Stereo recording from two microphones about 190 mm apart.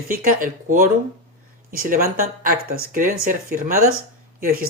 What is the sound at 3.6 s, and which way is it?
Speech, 40° right (ahead or behind).